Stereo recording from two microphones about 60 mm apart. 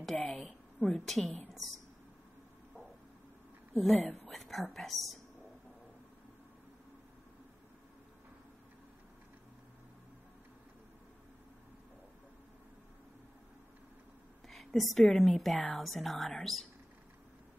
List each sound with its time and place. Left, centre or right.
0.0 s a woman's voice: centre
1.2 s a woman's voice: left
3.7 s speech: centre
14.5 s a woman's voice: centre